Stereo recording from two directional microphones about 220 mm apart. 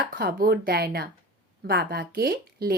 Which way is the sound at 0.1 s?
40° right (ahead or behind).